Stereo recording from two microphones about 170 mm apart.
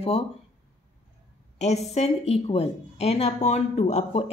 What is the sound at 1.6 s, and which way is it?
A woman's voice, 40° left (ahead or behind).